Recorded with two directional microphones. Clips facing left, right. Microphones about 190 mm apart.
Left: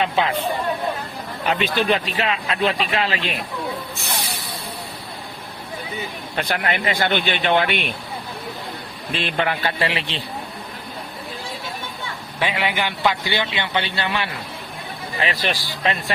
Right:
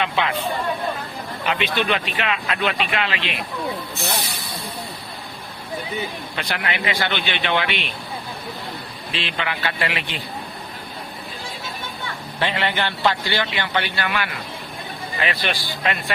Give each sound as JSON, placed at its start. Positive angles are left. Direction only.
{"t": 0.0, "sound": "speech", "side_deg": 35}
{"t": 1.5, "sound": "speech", "side_deg": 40}
{"t": 6.3, "sound": "speech", "side_deg": 50}
{"t": 9.1, "sound": "speech", "side_deg": 50}
{"t": 12.4, "sound": "a man's voice", "side_deg": 10}